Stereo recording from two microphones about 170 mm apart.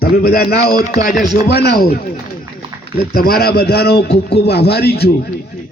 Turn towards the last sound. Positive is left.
turn(degrees=70)  # may be behind; listen again after turning